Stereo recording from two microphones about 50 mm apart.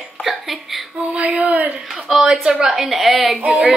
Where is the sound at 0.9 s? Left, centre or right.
Right.